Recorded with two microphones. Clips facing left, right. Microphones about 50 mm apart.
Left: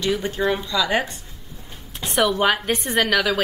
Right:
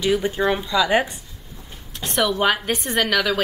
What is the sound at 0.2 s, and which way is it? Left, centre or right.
Speech, centre.